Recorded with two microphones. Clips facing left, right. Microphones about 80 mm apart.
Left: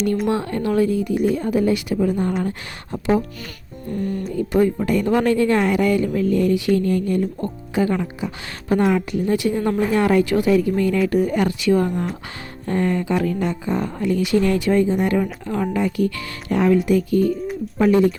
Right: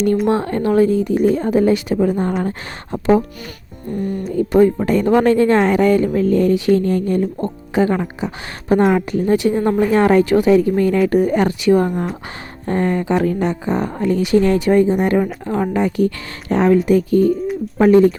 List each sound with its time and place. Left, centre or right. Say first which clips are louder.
0.3 s a woman's voice: right 4 dB; right
3.9 s a woman's voice: right 3 dB; right
4.3 s a woman's voice: right 6 dB; right
8.8 s a woman's voice: right 3 dB; right